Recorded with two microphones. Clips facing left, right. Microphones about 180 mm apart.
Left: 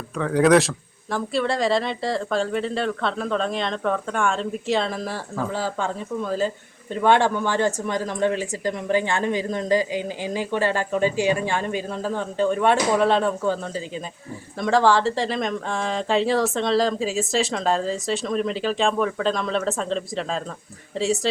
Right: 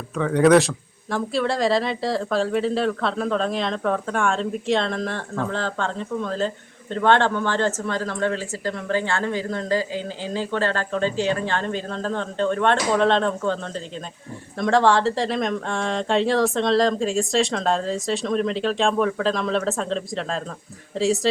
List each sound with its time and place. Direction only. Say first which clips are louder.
0.2 s speech: right 1 dB; centre (ahead or behind)